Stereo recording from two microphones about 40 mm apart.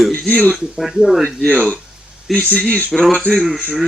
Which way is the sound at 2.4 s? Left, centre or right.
Left.